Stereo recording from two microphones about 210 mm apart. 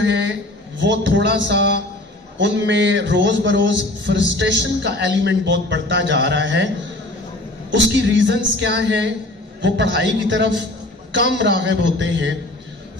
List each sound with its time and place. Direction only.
0.0 s a sound: 55° right (ahead or behind)
2.3 s a man's voice: 55° right (ahead or behind)
7.7 s a man's voice: 55° right (ahead or behind)